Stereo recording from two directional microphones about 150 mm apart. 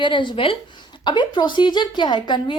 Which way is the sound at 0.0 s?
35° left (ahead or behind).